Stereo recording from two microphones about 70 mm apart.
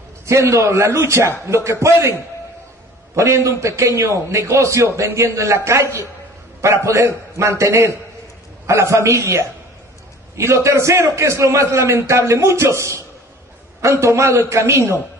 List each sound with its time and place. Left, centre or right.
0.3 s a man's voice: right
3.2 s a man's voice: right